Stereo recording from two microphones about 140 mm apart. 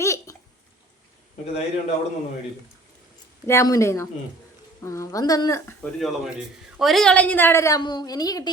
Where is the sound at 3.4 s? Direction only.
20° left (ahead or behind).